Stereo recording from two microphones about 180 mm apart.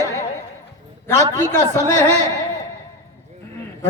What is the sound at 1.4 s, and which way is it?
Music, 15° left (ahead or behind).